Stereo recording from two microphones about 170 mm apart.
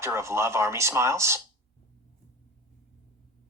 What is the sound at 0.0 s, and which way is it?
Speech, 15° right (ahead or behind).